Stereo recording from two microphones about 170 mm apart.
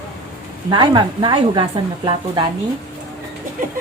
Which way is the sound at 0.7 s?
25° right (ahead or behind).